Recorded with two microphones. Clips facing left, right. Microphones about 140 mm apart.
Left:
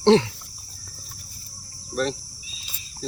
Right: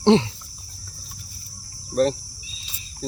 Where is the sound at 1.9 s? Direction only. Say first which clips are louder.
Right 6 dB; 40° right (ahead or behind).